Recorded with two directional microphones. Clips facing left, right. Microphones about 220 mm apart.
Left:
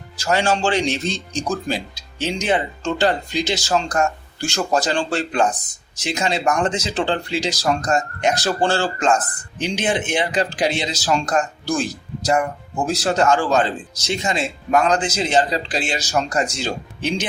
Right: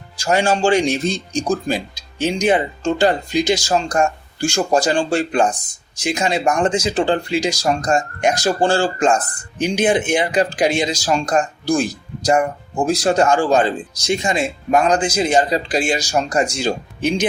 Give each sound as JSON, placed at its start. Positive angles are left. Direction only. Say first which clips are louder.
{"t": 0.2, "sound": "speech", "louder": "right 3 dB", "side_deg": -15}